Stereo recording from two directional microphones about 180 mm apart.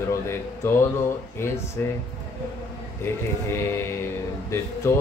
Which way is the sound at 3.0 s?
15° left (ahead or behind).